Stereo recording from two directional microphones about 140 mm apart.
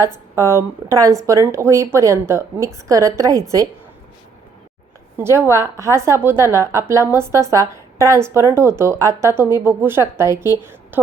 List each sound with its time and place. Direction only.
0.3 s a woman's voice: 20° right (ahead or behind)
5.1 s a woman's voice: 20° right (ahead or behind)